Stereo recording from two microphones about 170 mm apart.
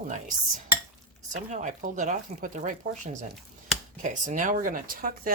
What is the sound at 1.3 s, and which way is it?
Speech, 50° right (ahead or behind).